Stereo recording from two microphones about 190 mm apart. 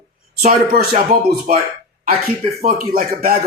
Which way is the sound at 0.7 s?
50° right (ahead or behind).